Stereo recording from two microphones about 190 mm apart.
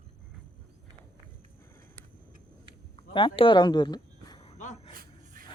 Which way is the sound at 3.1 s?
25° left (ahead or behind).